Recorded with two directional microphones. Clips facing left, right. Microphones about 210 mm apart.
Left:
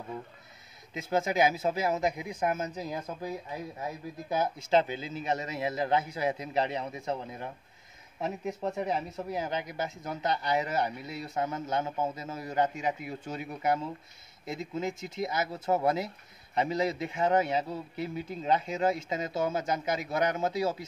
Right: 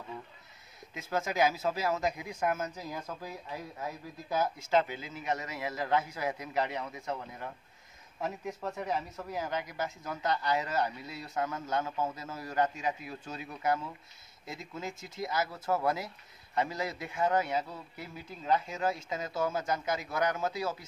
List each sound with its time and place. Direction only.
0.9 s speech: 20° left (ahead or behind)
8.5 s speech: 20° left (ahead or behind)